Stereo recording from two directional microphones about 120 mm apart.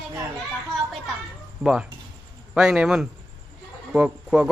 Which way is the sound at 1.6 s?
15° right (ahead or behind).